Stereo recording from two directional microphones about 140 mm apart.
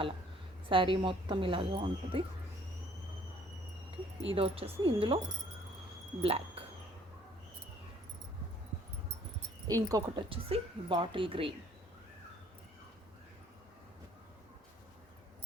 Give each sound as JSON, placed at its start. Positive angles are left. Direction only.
{"t": 0.7, "sound": "a woman's voice", "side_deg": -35}
{"t": 3.9, "sound": "speech", "side_deg": -45}
{"t": 6.2, "sound": "speech", "side_deg": -40}
{"t": 9.6, "sound": "speech", "side_deg": -25}
{"t": 10.2, "sound": "a woman's voice", "side_deg": -40}